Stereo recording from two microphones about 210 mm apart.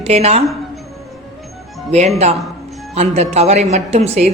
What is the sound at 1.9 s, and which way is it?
A man's voice, 30° right (ahead or behind).